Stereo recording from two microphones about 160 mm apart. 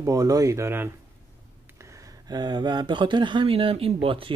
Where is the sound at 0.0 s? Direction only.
20° right (ahead or behind).